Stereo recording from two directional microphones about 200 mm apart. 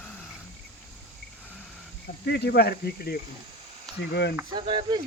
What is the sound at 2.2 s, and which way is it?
Speech, 55° left (ahead or behind).